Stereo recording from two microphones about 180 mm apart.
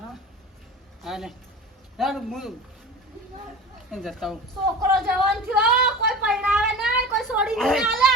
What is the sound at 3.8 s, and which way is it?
Speech, centre (ahead or behind).